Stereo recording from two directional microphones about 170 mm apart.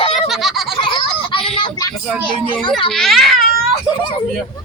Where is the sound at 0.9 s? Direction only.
30° left (ahead or behind).